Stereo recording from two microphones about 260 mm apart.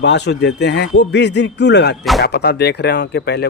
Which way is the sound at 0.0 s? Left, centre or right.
Left.